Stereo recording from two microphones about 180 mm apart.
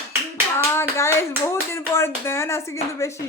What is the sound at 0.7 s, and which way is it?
Speech, 15° left (ahead or behind).